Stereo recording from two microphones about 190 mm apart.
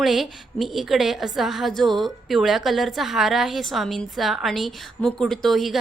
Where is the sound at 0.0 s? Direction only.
Centre (ahead or behind).